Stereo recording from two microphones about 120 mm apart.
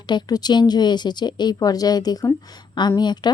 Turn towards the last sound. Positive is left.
turn(degrees=35)  # may be behind; listen again after turning